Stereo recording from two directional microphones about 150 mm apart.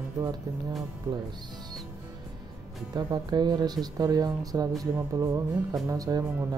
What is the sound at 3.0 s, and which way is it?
Speech, 30° right (ahead or behind).